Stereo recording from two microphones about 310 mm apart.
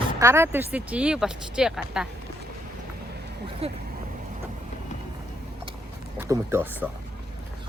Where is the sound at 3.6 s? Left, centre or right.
Centre.